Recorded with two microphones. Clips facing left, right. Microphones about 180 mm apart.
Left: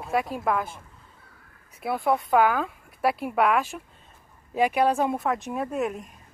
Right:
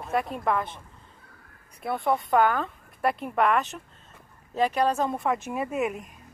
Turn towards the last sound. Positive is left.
turn(degrees=0)  # may be behind; listen again after turning